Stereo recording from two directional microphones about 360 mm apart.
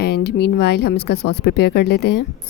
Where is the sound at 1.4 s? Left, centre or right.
Left.